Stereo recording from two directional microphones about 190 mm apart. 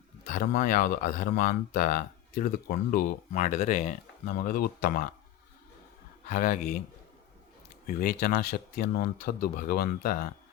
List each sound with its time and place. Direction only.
0.3 s speech: 45° left (ahead or behind)
6.2 s speech: 45° left (ahead or behind)
7.9 s speech: 50° left (ahead or behind)